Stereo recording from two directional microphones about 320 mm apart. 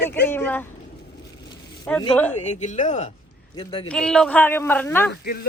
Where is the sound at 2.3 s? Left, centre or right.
Left.